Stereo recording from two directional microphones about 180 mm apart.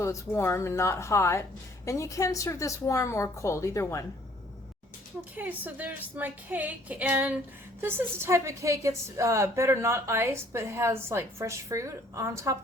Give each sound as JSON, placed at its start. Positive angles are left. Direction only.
{"t": 0.0, "sound": "a woman's voice", "side_deg": 15}
{"t": 5.4, "sound": "a woman's voice", "side_deg": -10}